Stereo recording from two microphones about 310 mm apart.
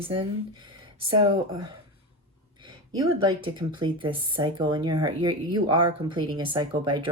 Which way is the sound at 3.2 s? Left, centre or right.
Centre.